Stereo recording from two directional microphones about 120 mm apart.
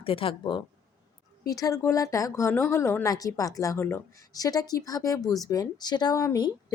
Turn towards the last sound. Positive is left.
turn(degrees=30)  # may be behind; listen again after turning